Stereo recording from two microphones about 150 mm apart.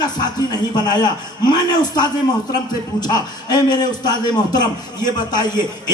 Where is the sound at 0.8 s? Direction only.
30° left (ahead or behind).